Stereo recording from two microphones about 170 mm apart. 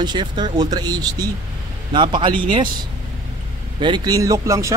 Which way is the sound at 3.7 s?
25° right (ahead or behind).